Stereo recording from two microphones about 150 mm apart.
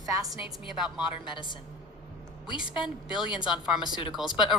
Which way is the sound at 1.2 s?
35° left (ahead or behind).